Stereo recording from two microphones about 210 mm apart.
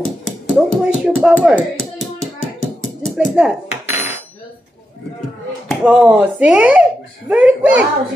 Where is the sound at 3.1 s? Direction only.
5° right (ahead or behind).